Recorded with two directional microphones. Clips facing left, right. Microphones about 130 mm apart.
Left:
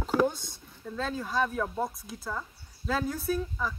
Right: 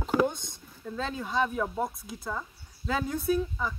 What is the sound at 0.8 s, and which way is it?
Speech, 5° right (ahead or behind).